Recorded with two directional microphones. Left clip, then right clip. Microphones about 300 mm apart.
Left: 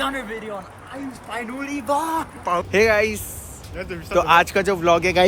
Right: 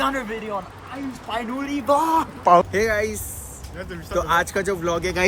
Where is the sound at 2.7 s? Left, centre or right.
Centre.